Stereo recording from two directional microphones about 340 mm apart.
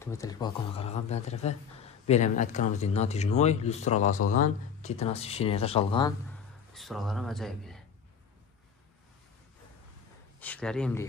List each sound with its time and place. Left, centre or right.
0.0 s speech: centre
6.7 s speech: centre
10.4 s speech: centre